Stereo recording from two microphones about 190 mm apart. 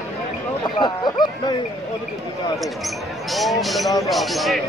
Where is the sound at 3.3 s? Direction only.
Centre (ahead or behind).